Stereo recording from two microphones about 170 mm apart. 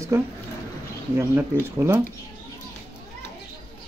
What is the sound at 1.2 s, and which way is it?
Speech, 15° right (ahead or behind).